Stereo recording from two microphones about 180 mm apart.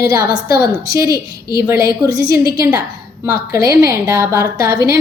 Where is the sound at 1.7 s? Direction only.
60° left (ahead or behind).